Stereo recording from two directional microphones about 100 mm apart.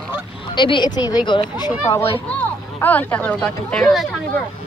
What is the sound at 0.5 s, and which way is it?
Speech, 55° left (ahead or behind).